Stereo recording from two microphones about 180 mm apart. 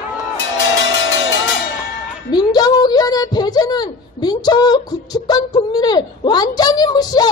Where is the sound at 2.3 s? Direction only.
20° left (ahead or behind).